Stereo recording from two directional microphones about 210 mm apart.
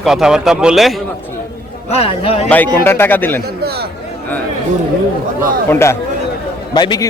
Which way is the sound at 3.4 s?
50° right (ahead or behind).